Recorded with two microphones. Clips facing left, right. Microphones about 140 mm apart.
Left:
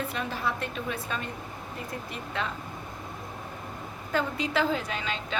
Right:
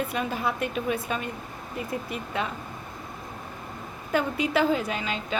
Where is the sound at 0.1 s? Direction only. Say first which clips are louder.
Right 3 dB; 15° right (ahead or behind).